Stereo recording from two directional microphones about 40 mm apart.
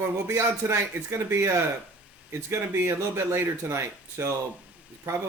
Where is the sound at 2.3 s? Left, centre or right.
Right.